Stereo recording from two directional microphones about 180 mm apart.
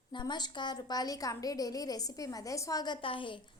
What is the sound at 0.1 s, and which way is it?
A woman's voice, 25° left (ahead or behind).